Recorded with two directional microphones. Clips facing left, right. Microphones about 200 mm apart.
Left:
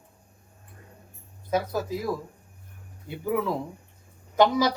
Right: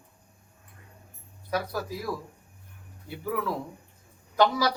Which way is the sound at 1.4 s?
20° left (ahead or behind).